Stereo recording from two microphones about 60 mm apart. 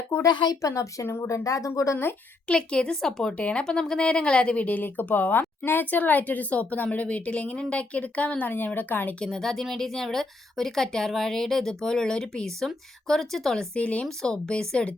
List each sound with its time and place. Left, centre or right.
0.2 s speech: left
1.0 s speech: left
1.3 s speech: left
2.5 s a woman's voice: centre; by 9.1 s left
9.2 s a woman's voice: centre
13.7 s a woman's voice: left